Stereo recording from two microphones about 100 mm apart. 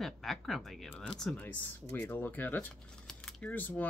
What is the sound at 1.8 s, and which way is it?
Speech, 20° left (ahead or behind).